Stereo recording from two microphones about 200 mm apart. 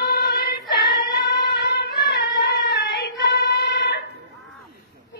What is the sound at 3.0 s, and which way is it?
Singing, 55° left (ahead or behind).